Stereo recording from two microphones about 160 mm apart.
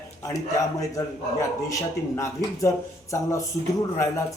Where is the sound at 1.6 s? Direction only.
20° left (ahead or behind).